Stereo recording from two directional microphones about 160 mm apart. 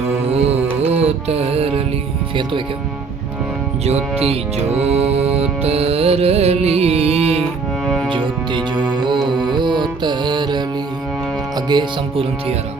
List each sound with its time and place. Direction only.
0.3 s music: 40° right (ahead or behind)
3.8 s music: 40° right (ahead or behind)